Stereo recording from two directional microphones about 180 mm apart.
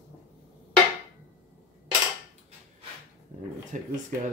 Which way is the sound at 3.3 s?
45° right (ahead or behind).